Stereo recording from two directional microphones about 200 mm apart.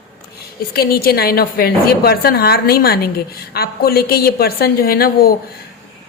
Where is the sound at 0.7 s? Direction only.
50° left (ahead or behind).